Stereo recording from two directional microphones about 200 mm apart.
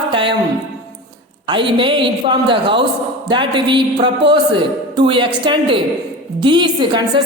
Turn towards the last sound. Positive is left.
turn(degrees=-25)  # may be behind; listen again after turning